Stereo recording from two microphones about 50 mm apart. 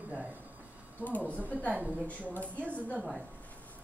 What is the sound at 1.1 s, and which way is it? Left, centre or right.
A woman's voice, left.